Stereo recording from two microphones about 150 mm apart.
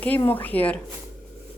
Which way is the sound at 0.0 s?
10° left (ahead or behind).